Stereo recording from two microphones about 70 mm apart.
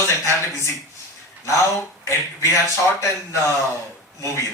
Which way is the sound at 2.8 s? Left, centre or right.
Left.